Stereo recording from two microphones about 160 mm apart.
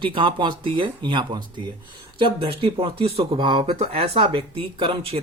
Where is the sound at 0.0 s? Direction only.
30° right (ahead or behind).